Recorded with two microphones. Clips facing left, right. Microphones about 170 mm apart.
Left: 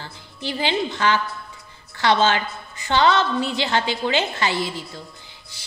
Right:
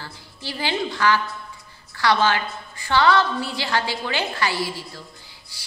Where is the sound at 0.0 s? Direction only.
20° left (ahead or behind).